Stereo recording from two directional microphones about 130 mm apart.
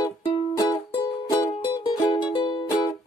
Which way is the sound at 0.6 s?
30° left (ahead or behind).